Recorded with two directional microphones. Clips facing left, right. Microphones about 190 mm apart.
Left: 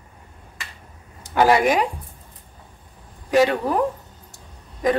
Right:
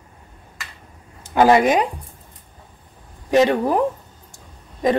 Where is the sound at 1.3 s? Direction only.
20° right (ahead or behind).